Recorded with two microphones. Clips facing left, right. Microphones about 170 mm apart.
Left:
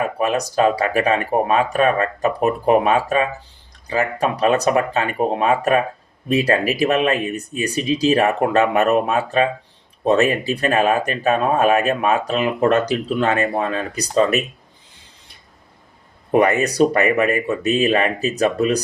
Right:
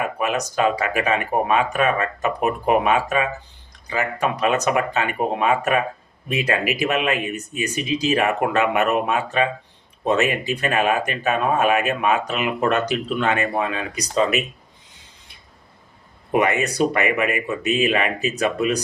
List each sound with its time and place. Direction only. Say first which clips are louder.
0.0 s speech: left 3 dB; 35° left (ahead or behind)
16.3 s speech: left 4 dB; 35° left (ahead or behind)